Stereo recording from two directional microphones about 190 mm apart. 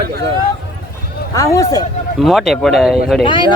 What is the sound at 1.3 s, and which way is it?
Speech, 15° left (ahead or behind).